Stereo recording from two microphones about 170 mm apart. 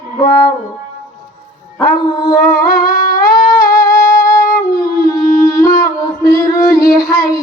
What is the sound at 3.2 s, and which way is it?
Music, 25° left (ahead or behind).